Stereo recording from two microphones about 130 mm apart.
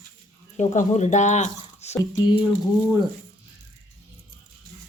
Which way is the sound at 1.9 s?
25° left (ahead or behind).